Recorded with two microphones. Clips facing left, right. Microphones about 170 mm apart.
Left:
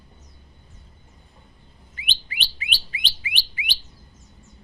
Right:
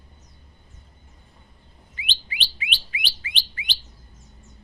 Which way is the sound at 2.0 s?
50° left (ahead or behind).